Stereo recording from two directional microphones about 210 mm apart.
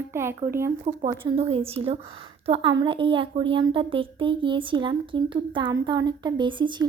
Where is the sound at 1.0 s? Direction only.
25° right (ahead or behind).